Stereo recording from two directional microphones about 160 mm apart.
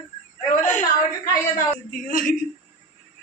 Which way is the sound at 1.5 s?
60° left (ahead or behind).